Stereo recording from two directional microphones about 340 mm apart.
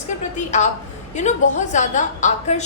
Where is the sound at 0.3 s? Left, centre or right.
Left.